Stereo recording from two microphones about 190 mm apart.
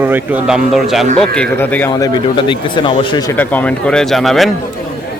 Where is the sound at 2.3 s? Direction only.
25° left (ahead or behind).